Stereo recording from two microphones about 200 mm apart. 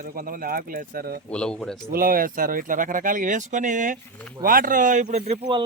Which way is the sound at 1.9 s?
45° right (ahead or behind).